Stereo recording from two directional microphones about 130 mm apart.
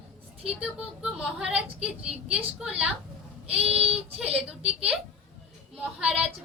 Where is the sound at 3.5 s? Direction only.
50° right (ahead or behind).